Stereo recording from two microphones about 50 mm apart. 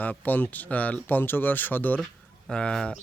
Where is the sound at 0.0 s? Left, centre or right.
Left.